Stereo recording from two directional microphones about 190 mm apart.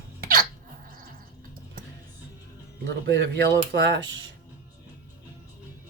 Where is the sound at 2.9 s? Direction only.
65° right (ahead or behind).